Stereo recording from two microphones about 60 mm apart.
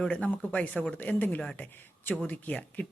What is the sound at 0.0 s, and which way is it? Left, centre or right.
Speech, centre.